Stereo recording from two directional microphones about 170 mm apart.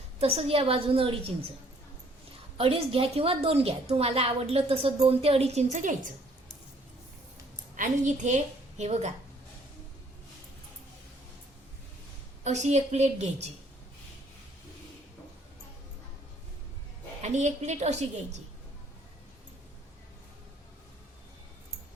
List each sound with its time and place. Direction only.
0.2 s a woman's voice: 35° right (ahead or behind)
2.6 s a woman's voice: 35° right (ahead or behind)
7.8 s a woman's voice: 45° right (ahead or behind)
12.5 s a woman's voice: 45° right (ahead or behind)
17.2 s a woman's voice: 40° right (ahead or behind)